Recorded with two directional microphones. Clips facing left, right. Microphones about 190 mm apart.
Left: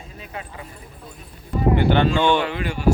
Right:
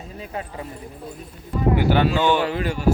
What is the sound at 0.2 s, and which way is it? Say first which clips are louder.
Speech: right 4 dB; 35° right (ahead or behind).